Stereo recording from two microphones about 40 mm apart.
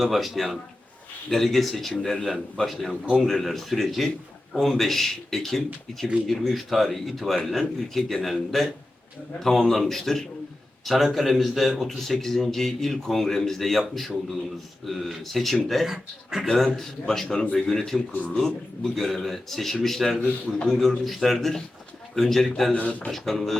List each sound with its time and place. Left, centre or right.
0.0 s a man's voice: centre
15.9 s a man's voice: centre
16.5 s a man's voice: centre
22.7 s speech: left
23.0 s a man's voice: centre